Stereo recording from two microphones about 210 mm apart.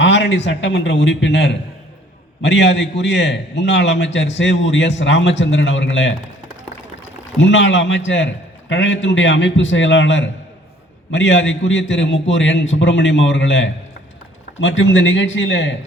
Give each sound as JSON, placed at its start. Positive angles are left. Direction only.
{"t": 0.0, "sound": "a man's voice", "side_deg": 60}
{"t": 7.3, "sound": "a man's voice", "side_deg": 60}